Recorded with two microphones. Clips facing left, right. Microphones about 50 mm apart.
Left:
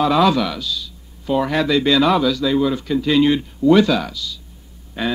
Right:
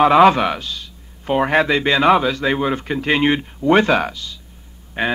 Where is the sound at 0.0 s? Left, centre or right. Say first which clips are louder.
Right 4 dB; right.